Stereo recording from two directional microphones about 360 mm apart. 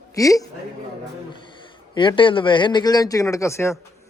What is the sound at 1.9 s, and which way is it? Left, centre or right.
Speech, centre.